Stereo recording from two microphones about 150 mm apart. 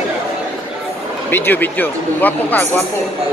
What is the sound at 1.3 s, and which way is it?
Speech, 15° left (ahead or behind).